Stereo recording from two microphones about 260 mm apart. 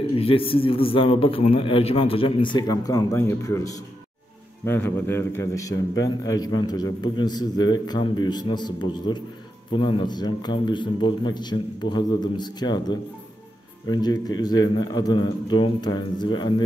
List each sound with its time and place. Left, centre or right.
0.1 s a man's voice: left